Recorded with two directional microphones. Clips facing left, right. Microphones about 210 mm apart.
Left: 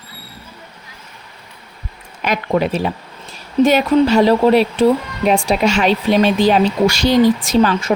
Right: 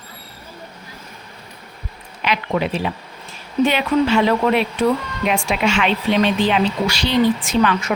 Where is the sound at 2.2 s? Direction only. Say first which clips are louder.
Left 4 dB; 45° left (ahead or behind).